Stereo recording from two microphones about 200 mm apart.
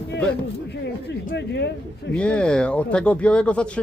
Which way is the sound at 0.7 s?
60° left (ahead or behind).